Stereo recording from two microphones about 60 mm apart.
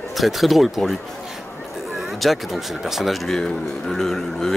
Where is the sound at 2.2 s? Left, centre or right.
Centre.